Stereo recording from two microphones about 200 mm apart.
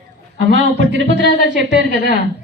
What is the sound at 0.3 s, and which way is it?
Speech, 65° right (ahead or behind).